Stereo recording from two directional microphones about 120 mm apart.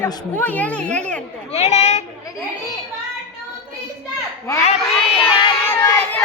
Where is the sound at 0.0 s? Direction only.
15° left (ahead or behind).